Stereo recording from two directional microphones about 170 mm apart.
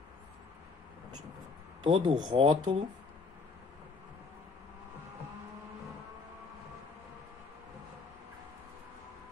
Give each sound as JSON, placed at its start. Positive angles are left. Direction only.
{"t": 1.8, "sound": "speech", "side_deg": -30}